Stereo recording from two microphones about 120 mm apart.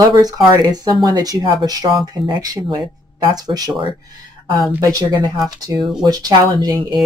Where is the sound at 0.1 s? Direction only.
35° right (ahead or behind).